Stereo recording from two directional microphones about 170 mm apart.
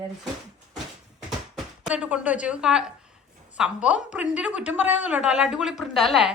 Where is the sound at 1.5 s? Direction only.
5° right (ahead or behind).